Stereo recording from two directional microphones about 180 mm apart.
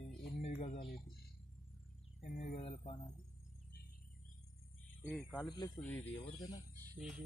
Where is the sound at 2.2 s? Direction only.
40° left (ahead or behind).